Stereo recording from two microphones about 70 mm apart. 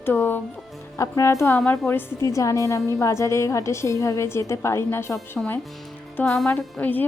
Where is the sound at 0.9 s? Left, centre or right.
Left.